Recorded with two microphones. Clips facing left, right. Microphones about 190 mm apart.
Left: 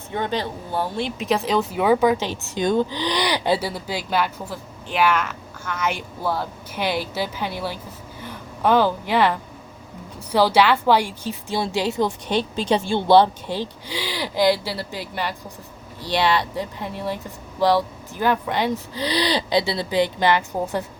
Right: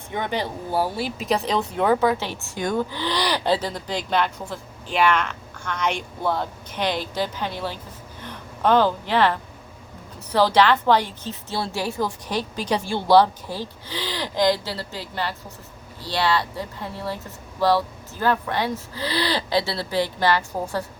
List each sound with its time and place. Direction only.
0.1 s a woman's voice: 15° right (ahead or behind); by 20.8 s 20° left (ahead or behind)